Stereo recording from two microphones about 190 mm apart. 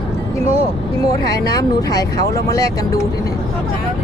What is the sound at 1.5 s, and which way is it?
Speech, 20° left (ahead or behind).